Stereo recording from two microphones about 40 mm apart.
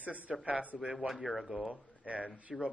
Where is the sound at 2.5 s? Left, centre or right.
Centre.